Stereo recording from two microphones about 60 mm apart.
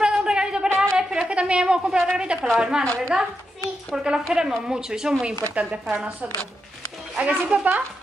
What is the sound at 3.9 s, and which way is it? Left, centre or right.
A woman's voice, centre.